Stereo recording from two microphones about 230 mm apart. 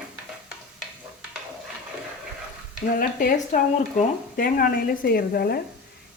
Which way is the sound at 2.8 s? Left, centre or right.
Left.